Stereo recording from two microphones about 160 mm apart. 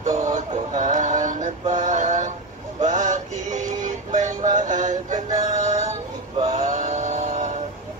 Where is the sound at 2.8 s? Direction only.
50° right (ahead or behind).